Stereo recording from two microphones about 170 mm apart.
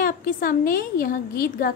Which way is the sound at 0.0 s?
55° left (ahead or behind).